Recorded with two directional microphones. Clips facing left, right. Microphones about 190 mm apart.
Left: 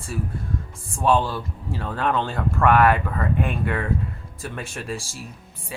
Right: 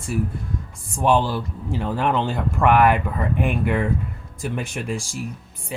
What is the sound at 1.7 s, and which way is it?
Speech, 15° right (ahead or behind).